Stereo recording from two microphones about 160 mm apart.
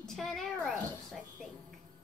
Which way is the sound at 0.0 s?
Centre (ahead or behind).